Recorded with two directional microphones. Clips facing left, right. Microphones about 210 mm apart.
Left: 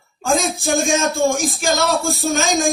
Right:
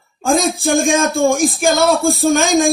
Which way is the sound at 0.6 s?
55° right (ahead or behind).